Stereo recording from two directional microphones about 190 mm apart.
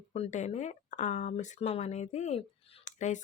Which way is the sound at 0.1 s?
35° left (ahead or behind).